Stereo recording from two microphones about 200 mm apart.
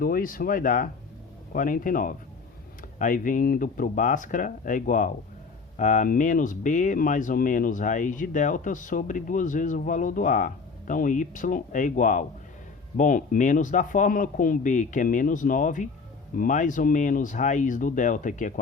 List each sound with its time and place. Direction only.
0.0 s speech: 45° left (ahead or behind)